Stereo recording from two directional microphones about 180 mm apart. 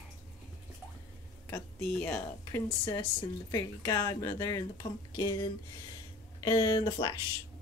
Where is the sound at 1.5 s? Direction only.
10° left (ahead or behind).